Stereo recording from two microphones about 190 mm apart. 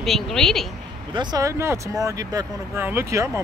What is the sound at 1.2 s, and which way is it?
Speech, 20° right (ahead or behind).